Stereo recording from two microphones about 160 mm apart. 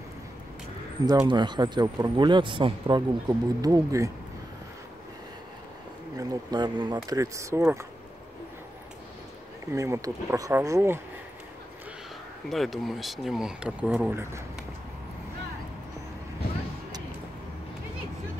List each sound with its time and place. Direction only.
1.0 s speech: 25° right (ahead or behind)
6.1 s speech: 25° right (ahead or behind)
9.7 s speech: 20° right (ahead or behind)
12.4 s speech: centre (ahead or behind)